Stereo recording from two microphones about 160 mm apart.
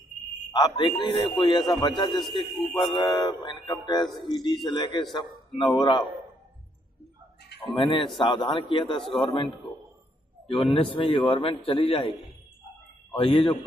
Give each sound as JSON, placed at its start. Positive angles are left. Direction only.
{"t": 0.5, "sound": "speech", "side_deg": 25}
{"t": 7.7, "sound": "a man's voice", "side_deg": 30}
{"t": 13.1, "sound": "a man's voice", "side_deg": 30}